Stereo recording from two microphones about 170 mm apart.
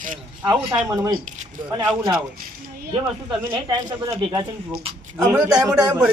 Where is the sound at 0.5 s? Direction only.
20° right (ahead or behind).